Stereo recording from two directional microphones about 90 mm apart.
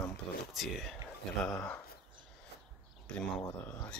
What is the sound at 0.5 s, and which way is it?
Speech, centre (ahead or behind).